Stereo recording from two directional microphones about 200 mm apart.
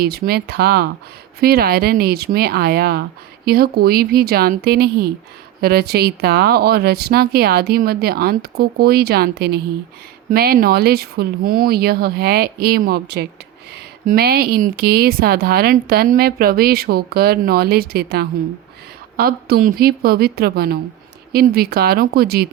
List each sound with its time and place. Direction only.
0.0 s speech: 50° right (ahead or behind)